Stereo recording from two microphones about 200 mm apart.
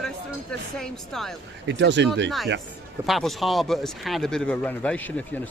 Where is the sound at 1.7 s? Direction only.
60° right (ahead or behind).